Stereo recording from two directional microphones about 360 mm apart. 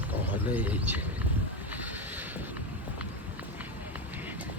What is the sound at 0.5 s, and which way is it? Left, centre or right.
Speech, centre.